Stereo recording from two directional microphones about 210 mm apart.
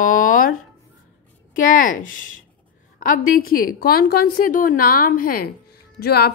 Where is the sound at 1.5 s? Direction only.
40° left (ahead or behind).